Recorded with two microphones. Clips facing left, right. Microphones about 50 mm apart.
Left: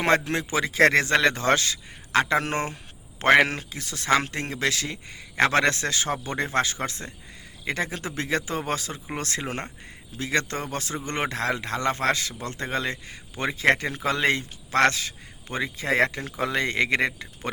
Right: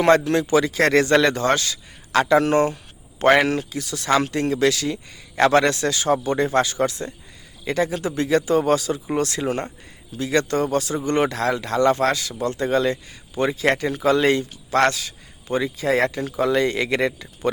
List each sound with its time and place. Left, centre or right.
0.0 s a man's voice: left